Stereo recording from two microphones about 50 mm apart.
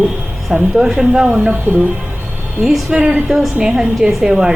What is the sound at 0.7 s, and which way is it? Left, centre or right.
Speech, centre.